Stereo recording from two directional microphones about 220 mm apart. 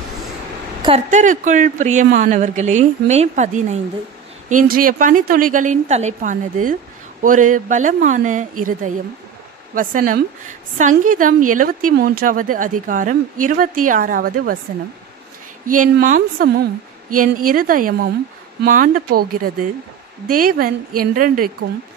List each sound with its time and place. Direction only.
0.8 s a woman's voice: 30° right (ahead or behind)
15.6 s a woman's voice: 35° right (ahead or behind)